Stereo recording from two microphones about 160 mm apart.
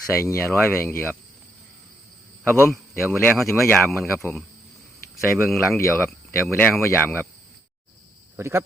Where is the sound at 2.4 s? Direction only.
10° left (ahead or behind).